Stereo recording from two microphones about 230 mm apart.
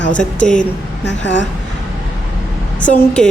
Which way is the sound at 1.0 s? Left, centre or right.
Left.